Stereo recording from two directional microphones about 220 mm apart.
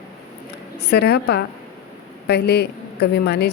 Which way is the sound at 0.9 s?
50° left (ahead or behind).